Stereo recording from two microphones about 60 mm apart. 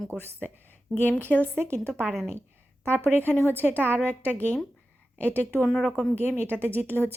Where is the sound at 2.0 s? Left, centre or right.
Centre.